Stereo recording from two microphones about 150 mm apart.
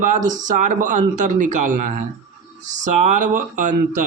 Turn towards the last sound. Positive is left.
turn(degrees=-55)  # may be behind; listen again after turning